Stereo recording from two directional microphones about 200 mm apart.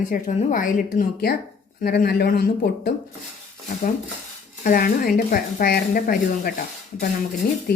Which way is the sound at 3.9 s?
40° left (ahead or behind).